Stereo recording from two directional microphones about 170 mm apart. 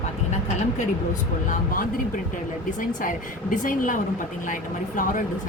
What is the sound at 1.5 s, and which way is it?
Speech, 55° left (ahead or behind).